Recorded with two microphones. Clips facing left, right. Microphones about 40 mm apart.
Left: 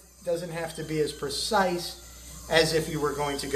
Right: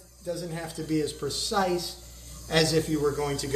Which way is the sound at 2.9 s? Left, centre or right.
Left.